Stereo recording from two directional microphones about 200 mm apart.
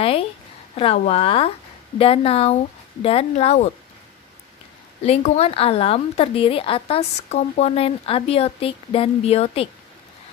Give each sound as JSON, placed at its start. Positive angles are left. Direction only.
{"t": 0.7, "sound": "a woman's voice", "side_deg": 30}
{"t": 5.0, "sound": "a woman's voice", "side_deg": 30}